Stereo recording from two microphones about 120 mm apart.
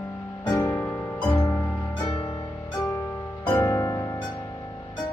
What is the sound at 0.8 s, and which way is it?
Music, 20° left (ahead or behind).